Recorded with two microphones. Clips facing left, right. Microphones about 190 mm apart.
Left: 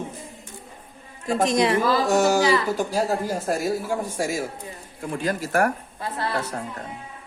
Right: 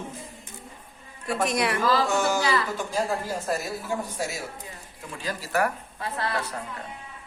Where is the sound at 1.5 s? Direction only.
25° left (ahead or behind).